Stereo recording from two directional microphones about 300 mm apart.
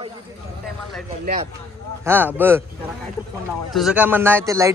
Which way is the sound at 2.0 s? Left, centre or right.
Centre.